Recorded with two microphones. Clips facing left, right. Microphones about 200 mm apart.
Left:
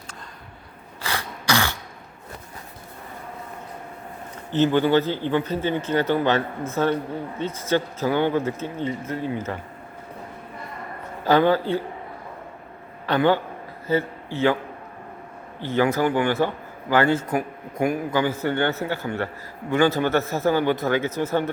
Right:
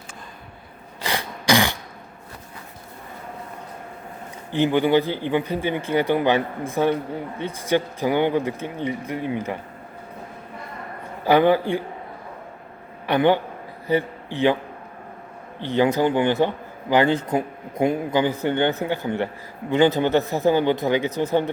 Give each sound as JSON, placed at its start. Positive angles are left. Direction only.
{"t": 1.0, "sound": "a sound", "side_deg": -15}
{"t": 4.5, "sound": "a man's voice", "side_deg": -15}
{"t": 11.3, "sound": "a man's voice", "side_deg": -15}
{"t": 13.1, "sound": "a man's voice", "side_deg": -15}
{"t": 15.6, "sound": "a man's voice", "side_deg": -20}